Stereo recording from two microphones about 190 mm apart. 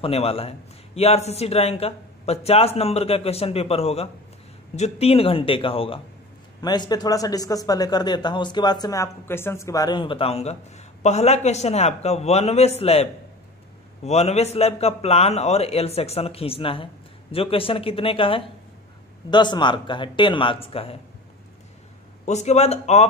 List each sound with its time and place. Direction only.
0.0 s a man's voice: 30° left (ahead or behind)
22.2 s a man's voice: 35° left (ahead or behind)